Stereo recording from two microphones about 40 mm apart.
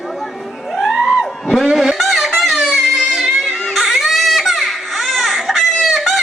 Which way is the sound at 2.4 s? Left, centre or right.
Centre.